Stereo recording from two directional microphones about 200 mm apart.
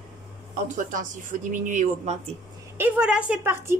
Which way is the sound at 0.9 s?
40° right (ahead or behind).